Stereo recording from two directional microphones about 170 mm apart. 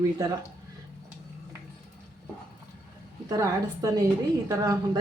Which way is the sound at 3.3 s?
20° right (ahead or behind).